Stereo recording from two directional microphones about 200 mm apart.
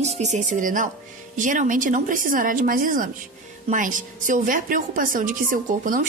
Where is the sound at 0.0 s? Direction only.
35° right (ahead or behind).